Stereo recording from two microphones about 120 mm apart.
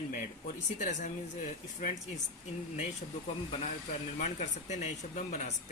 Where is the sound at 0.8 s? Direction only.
90° left.